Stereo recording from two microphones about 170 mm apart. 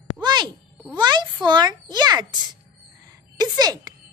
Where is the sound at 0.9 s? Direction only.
25° right (ahead or behind).